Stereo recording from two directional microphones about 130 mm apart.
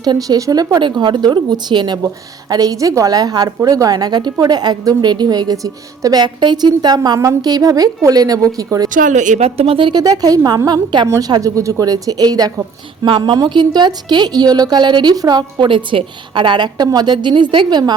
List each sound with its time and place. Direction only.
0.0 s a woman's voice: 30° right (ahead or behind)
8.9 s a woman's voice: 85° right; by 9.5 s 70° right (ahead or behind)
9.6 s a woman's voice: 45° right (ahead or behind)